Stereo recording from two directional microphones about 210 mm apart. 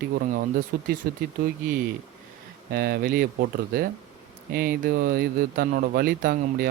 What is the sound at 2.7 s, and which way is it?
Speech, 50° right (ahead or behind).